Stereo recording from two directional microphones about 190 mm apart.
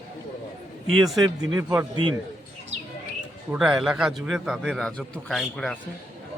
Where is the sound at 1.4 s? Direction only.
20° right (ahead or behind).